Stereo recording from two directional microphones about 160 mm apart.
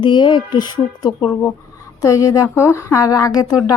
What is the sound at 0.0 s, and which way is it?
Speech, 30° left (ahead or behind).